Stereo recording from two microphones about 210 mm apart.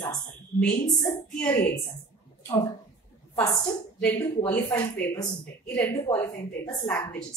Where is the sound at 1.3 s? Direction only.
5° left (ahead or behind).